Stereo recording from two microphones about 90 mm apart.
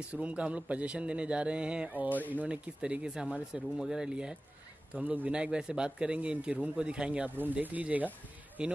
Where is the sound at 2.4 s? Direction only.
15° right (ahead or behind).